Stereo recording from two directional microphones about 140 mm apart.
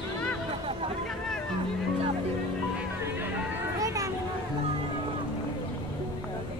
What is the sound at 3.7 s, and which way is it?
Vehicle, 25° right (ahead or behind).